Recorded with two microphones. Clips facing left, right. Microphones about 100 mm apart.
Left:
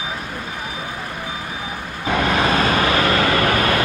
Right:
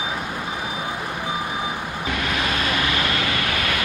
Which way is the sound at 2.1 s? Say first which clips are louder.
Left 8 dB; 35° left (ahead or behind).